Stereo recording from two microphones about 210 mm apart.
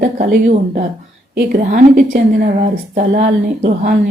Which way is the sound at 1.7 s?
35° right (ahead or behind).